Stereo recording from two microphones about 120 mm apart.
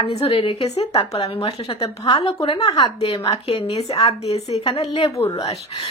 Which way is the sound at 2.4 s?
45° left (ahead or behind).